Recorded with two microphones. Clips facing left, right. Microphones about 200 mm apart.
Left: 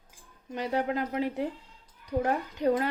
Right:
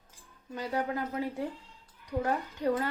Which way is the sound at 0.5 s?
20° left (ahead or behind).